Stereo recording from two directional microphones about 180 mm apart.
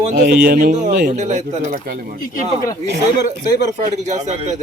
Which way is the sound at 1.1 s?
40° right (ahead or behind).